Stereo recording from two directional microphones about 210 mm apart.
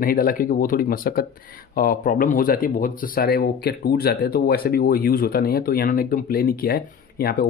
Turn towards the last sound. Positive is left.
turn(degrees=45)  # may be behind; listen again after turning